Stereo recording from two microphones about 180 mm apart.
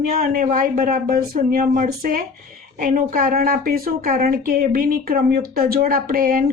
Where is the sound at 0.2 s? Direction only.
50° right (ahead or behind).